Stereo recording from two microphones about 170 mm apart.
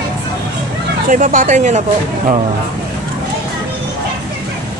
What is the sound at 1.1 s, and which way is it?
Speech, 50° right (ahead or behind).